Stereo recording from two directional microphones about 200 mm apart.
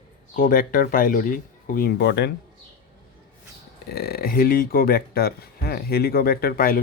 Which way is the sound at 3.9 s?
50° left (ahead or behind).